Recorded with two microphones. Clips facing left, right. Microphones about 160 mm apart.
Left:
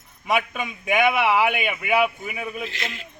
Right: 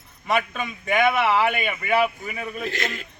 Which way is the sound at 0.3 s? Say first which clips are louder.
Even; 10° left (ahead or behind).